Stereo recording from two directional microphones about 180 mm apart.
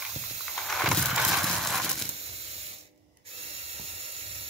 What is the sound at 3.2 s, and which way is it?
Ratchet, 35° right (ahead or behind).